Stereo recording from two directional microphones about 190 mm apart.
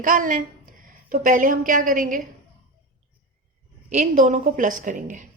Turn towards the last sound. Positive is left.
turn(degrees=-40)  # may be behind; listen again after turning